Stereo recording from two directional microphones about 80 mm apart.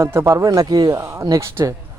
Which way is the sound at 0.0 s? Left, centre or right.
Right.